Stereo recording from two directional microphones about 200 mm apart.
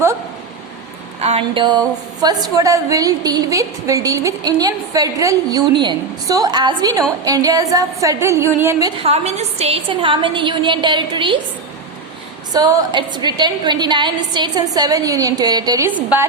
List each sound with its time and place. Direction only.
1.2 s a woman's voice: 30° right (ahead or behind); by 8.9 s 10° right (ahead or behind)
9.0 s a woman's voice: 30° right (ahead or behind)
12.5 s a woman's voice: 20° right (ahead or behind)